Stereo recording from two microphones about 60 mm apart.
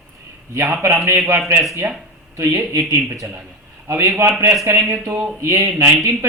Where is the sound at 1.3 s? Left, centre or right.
Right.